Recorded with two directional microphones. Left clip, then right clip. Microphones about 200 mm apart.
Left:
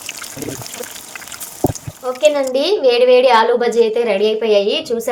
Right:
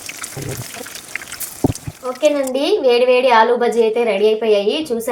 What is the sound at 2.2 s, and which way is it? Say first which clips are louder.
A woman's voice: left 2 dB; 35° left (ahead or behind).